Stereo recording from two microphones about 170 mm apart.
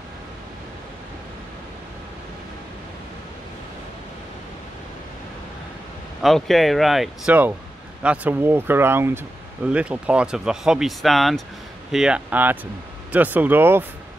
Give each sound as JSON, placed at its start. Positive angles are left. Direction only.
{"t": 6.2, "sound": "speech", "side_deg": 0}